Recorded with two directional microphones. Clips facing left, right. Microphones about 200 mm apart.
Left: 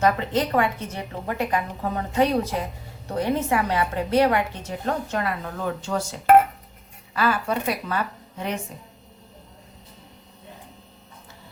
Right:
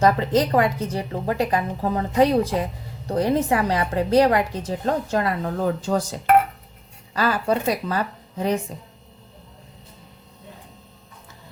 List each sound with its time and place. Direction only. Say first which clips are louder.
0.0 s a woman's voice: right 3 dB; 35° right (ahead or behind)